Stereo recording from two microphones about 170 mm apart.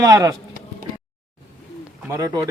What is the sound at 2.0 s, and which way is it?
Speech, 20° right (ahead or behind).